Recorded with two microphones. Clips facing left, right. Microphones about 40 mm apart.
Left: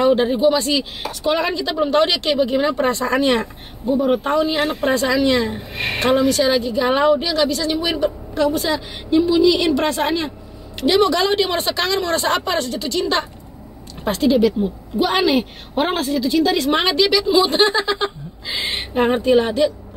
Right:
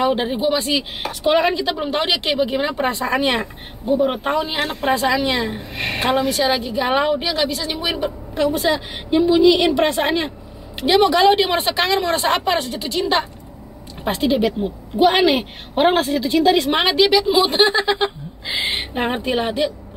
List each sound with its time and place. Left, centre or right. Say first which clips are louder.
0.0 s a woman's voice: left 4 dB; centre
4.6 s speech: left 3 dB; centre
4.8 s a woman's voice: even; centre